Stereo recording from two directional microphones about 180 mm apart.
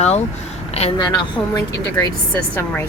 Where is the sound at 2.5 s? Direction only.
10° left (ahead or behind).